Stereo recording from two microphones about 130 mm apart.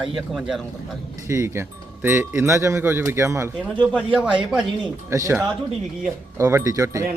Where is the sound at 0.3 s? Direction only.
5° right (ahead or behind).